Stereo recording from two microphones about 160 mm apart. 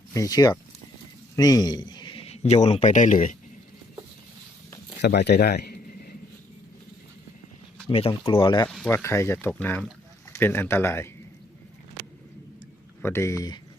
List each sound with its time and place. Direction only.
0.1 s a man's voice: 20° left (ahead or behind); by 3.3 s 55° left (ahead or behind)
5.0 s a sound: 90° left; by 6.1 s 70° left (ahead or behind)
7.9 s speech: 35° left (ahead or behind)
8.9 s speech: 15° left (ahead or behind)
13.0 s speech: 15° left (ahead or behind)